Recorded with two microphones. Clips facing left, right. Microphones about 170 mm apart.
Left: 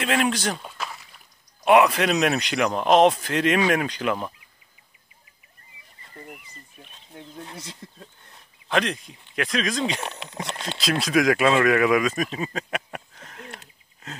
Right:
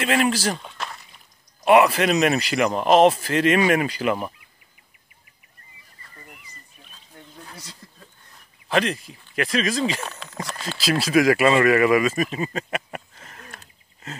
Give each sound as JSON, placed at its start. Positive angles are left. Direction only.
{"t": 0.0, "sound": "speech", "side_deg": 0}
{"t": 6.2, "sound": "a sound", "side_deg": 50}
{"t": 6.9, "sound": "wild animals", "side_deg": 25}
{"t": 8.6, "sound": "speech", "side_deg": 0}
{"t": 10.0, "sound": "speech", "side_deg": 20}
{"t": 10.8, "sound": "speech", "side_deg": -5}